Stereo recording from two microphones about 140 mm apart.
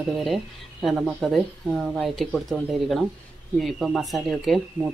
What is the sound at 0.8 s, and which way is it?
Speech, centre (ahead or behind).